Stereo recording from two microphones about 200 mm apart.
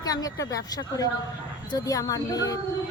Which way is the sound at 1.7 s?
20° left (ahead or behind).